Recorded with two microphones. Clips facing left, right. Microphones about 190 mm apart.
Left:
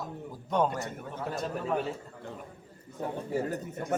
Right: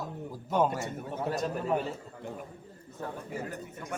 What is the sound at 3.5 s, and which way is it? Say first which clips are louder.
Speech: left 6 dB; 40° left (ahead or behind).